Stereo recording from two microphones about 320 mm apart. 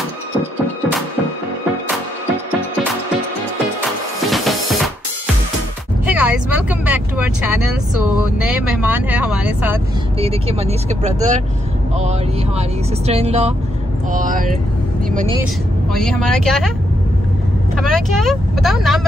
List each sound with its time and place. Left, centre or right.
4.3 s music: centre
6.0 s speech: centre
10.1 s speech: centre
15.0 s vehicle: right
15.9 s speech: centre
17.7 s speech: centre